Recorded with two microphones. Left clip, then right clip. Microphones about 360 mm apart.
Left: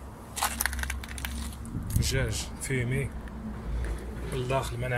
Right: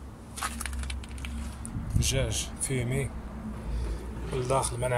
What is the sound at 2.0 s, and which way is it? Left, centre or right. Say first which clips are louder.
Speech: right 1 dB; centre.